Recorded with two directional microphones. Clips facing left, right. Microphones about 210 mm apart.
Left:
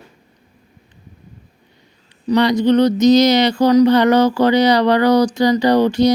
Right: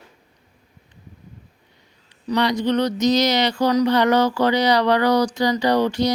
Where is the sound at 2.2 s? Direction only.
25° left (ahead or behind).